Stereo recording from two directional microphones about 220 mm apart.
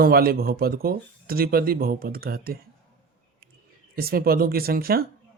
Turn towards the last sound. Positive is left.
turn(degrees=-45)  # may be behind; listen again after turning